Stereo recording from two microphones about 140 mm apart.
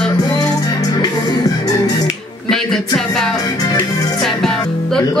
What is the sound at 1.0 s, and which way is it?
Music, 25° left (ahead or behind).